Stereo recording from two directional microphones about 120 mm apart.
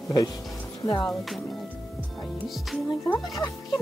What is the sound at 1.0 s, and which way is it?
Speech, centre (ahead or behind).